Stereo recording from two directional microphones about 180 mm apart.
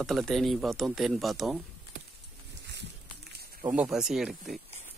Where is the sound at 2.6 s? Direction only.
70° right (ahead or behind).